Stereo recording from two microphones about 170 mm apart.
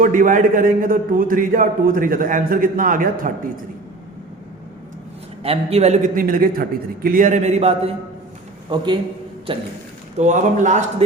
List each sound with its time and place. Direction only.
0.0 s a man's voice: 55° right (ahead or behind)
5.4 s a man's voice: 35° right (ahead or behind)
8.7 s a man's voice: 25° right (ahead or behind)
10.2 s a man's voice: 45° right (ahead or behind)